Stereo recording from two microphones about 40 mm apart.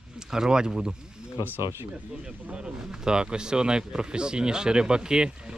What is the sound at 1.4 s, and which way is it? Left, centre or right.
Speech, right.